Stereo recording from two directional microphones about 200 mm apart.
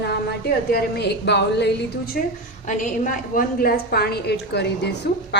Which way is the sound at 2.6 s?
40° left (ahead or behind).